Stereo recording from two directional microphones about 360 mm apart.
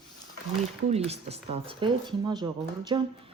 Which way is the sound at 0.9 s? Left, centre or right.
Centre.